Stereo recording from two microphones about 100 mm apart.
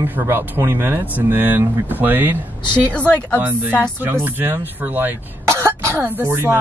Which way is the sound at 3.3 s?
20° right (ahead or behind).